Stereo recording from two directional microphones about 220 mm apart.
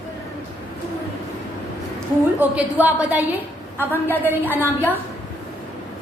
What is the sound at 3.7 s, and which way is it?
A woman's voice, 10° left (ahead or behind).